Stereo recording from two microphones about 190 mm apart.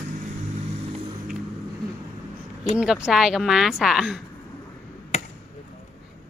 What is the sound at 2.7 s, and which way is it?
A woman's voice, 5° right (ahead or behind).